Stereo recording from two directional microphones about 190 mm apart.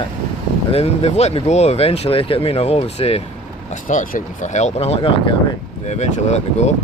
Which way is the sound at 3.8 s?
45° left (ahead or behind).